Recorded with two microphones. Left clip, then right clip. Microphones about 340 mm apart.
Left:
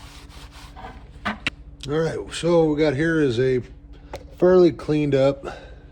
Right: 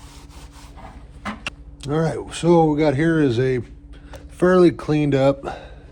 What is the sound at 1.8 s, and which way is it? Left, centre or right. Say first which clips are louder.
A man's voice: right 1 dB; centre.